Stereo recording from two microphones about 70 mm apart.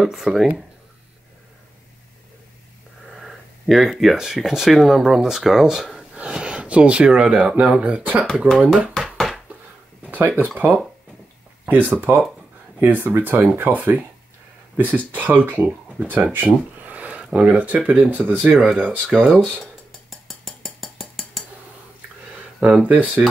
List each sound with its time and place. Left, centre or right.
0.0 s speech: centre
3.1 s speech: centre
8.5 s speech: centre
8.9 s a sound: centre
10.0 s speech: right
15.0 s speech: right
19.0 s speech: centre
19.6 s a sound: centre
22.6 s speech: centre